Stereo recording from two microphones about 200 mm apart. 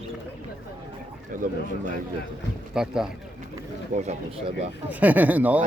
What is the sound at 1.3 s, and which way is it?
Speech, 40° right (ahead or behind).